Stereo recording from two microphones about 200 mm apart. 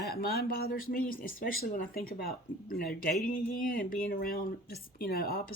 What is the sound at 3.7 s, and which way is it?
Speech, 45° left (ahead or behind).